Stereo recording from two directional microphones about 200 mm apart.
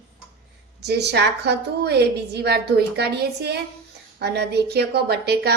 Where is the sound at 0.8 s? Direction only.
55° right (ahead or behind).